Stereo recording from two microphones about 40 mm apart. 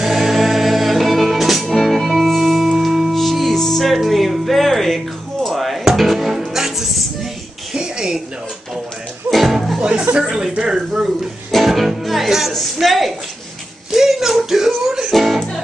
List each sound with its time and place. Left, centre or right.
0.0 s music: centre
7.7 s a sound: centre
9.3 s music: centre
9.8 s music: right
10.5 s speech: right
11.5 s music: centre
12.8 s a woman's voice: centre
13.9 s a sound: centre
15.0 s music: centre